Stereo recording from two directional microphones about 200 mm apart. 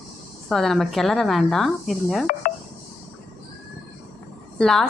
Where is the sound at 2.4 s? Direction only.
45° left (ahead or behind).